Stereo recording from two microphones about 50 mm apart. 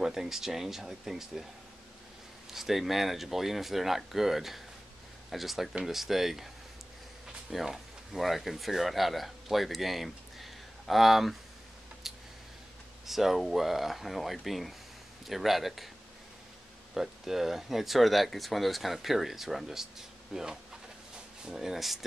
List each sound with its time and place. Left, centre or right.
0.0 s speech: centre
2.5 s speech: centre
7.5 s speech: centre
12.1 s a sound: centre
13.0 s speech: centre
16.9 s speech: centre